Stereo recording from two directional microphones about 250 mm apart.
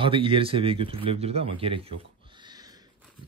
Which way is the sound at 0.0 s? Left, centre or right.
Right.